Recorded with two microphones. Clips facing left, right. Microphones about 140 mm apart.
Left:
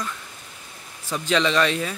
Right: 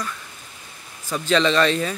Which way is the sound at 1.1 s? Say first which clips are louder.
Right 2 dB; 15° left (ahead or behind).